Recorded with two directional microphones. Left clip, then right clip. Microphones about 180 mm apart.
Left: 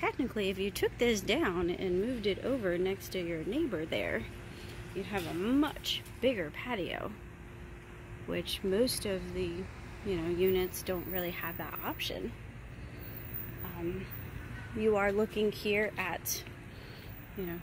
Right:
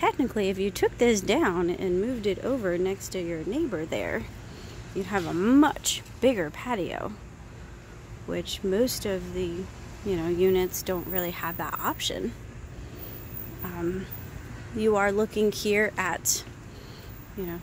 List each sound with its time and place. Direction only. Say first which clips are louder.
0.0 s speech: right 8 dB; 20° right (ahead or behind)
5.0 s speech: right 9 dB; 30° right (ahead or behind)
8.3 s speech: right 5 dB; 10° right (ahead or behind)
14.8 s speech: right 6 dB; 15° right (ahead or behind)
15.6 s speech: right 7 dB; 20° right (ahead or behind)